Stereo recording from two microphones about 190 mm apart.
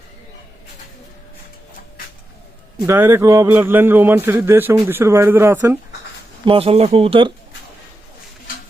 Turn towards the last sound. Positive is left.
turn(degrees=-30)  # may be behind; listen again after turning